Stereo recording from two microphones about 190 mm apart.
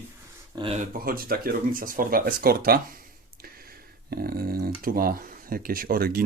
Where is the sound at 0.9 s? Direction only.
50° right (ahead or behind).